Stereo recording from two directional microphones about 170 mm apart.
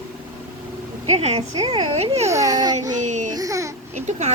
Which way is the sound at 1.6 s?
25° right (ahead or behind).